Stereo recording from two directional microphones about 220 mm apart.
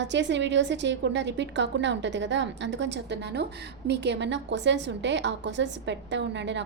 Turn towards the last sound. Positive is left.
turn(degrees=-55)  # may be behind; listen again after turning